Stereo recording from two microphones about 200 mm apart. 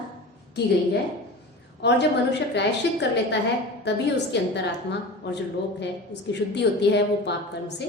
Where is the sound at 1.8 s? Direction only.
55° left (ahead or behind).